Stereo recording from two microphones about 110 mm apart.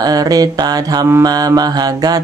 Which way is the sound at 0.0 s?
35° right (ahead or behind).